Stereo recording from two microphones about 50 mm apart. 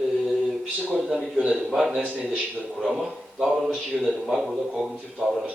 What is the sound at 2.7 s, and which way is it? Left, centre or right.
Speech, centre.